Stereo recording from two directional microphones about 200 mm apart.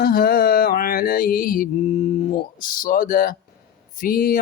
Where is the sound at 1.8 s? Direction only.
30° left (ahead or behind).